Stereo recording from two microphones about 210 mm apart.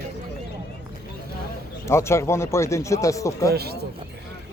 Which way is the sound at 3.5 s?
50° right (ahead or behind).